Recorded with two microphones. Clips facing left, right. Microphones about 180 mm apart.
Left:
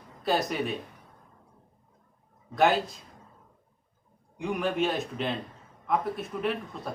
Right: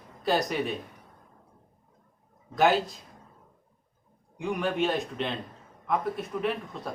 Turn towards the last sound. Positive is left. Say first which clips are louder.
# even
turn(degrees=0)  # may be behind; listen again after turning